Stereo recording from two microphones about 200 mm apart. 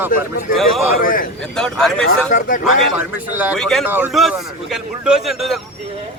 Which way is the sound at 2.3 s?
40° left (ahead or behind).